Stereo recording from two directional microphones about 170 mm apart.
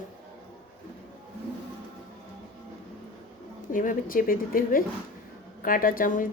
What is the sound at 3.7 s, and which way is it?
Speech, 50° left (ahead or behind).